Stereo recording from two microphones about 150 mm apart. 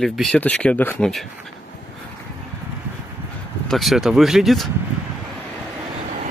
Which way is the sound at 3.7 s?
Centre (ahead or behind).